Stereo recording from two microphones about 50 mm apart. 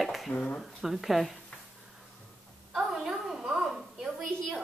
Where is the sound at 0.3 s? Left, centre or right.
Left.